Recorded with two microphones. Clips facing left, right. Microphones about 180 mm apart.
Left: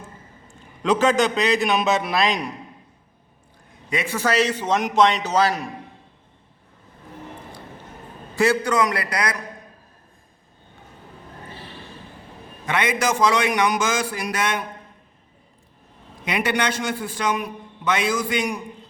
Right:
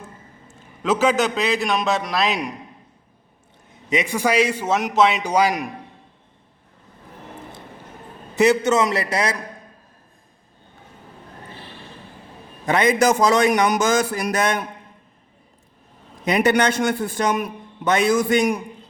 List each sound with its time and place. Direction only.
0.4 s a man's voice: 5° right (ahead or behind)
3.8 s a man's voice: 15° right (ahead or behind)
8.4 s a man's voice: 20° right (ahead or behind)
12.6 s a man's voice: 35° right (ahead or behind)
16.2 s a man's voice: 45° right (ahead or behind)